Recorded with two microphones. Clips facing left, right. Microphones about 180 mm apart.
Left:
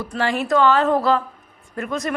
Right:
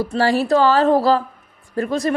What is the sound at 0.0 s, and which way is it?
A woman's voice, 35° right (ahead or behind).